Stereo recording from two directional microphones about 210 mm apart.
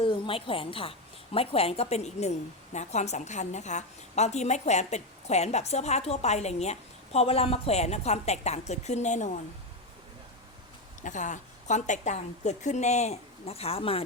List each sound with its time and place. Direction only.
0.0 s a woman's voice: 25° left (ahead or behind)
11.0 s a woman's voice: 35° left (ahead or behind)